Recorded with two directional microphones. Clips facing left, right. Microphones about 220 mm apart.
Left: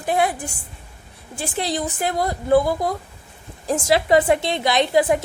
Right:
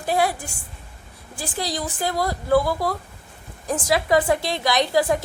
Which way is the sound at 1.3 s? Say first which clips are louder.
Left 3 dB; 25° left (ahead or behind).